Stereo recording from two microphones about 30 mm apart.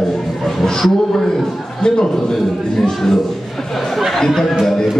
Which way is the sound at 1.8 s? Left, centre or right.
Left.